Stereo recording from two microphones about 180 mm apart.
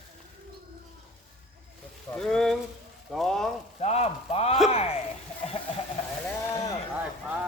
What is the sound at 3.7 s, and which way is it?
Speech, 35° left (ahead or behind).